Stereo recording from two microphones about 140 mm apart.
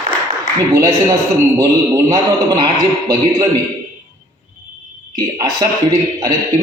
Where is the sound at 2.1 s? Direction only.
25° right (ahead or behind).